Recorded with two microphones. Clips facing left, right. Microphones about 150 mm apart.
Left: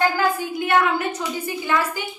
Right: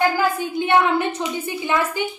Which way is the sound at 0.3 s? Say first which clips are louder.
Right 2 dB; 25° right (ahead or behind).